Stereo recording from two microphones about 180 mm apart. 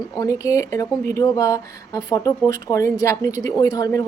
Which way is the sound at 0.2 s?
20° left (ahead or behind).